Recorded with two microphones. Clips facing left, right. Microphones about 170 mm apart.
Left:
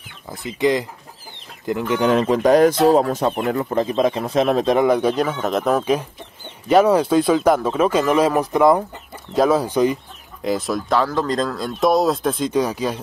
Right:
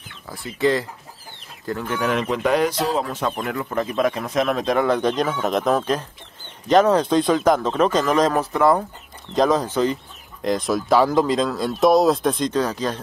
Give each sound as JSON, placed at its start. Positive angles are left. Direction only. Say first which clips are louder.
{"t": 0.3, "sound": "speech", "louder": "left 1 dB", "side_deg": 20}
{"t": 2.1, "sound": "speech", "louder": "left 6 dB", "side_deg": 35}
{"t": 4.7, "sound": "speech", "louder": "left 3 dB", "side_deg": 10}